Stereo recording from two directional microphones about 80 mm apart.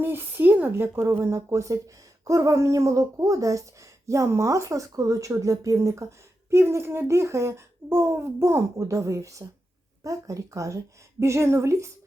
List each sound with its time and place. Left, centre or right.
0.0 s speech: right